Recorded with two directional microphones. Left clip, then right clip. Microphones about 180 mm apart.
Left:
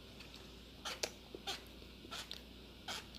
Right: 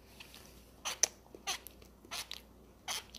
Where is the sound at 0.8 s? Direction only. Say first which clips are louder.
Right 7 dB; 25° left (ahead or behind).